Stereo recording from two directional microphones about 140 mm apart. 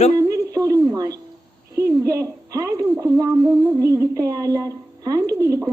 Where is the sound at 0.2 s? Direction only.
25° right (ahead or behind).